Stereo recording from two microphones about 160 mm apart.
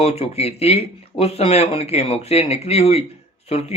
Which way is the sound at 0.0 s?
40° left (ahead or behind).